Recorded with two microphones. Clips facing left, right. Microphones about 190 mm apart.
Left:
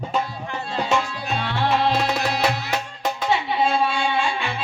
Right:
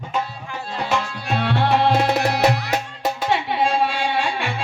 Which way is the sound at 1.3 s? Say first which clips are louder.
Right 4 dB; 65° right (ahead or behind).